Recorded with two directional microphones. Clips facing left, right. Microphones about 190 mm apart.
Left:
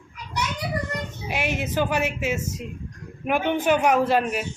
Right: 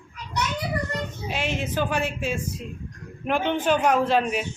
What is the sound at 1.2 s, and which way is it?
Speech, 10° left (ahead or behind).